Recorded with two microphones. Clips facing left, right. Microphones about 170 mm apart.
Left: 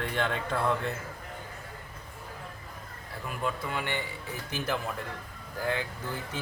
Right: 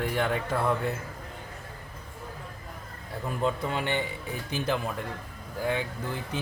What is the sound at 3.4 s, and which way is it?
Speech, 20° right (ahead or behind).